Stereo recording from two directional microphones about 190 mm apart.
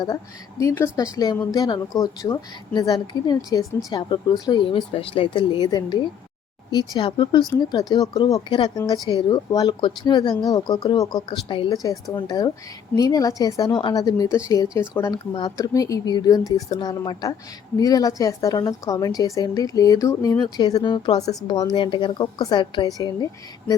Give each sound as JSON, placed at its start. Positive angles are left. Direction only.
{"t": 0.6, "sound": "a woman's voice", "side_deg": 15}